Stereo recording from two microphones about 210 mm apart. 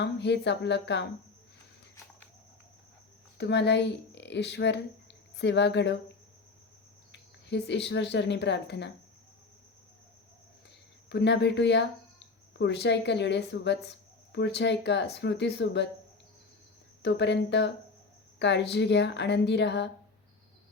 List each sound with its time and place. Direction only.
0.0 s speech: 55° left (ahead or behind)
3.3 s speech: 55° left (ahead or behind)
7.1 s speech: 55° left (ahead or behind)
11.1 s speech: 55° left (ahead or behind)
17.0 s speech: 55° left (ahead or behind)